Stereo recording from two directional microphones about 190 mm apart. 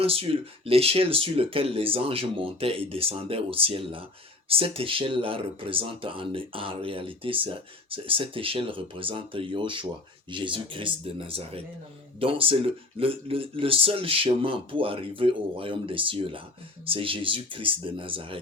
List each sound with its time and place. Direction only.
0.0 s speech: 30° right (ahead or behind)